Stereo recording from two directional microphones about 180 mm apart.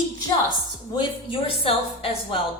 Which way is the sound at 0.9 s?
30° left (ahead or behind).